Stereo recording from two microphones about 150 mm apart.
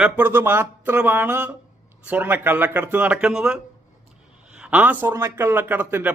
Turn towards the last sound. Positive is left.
turn(degrees=-10)  # may be behind; listen again after turning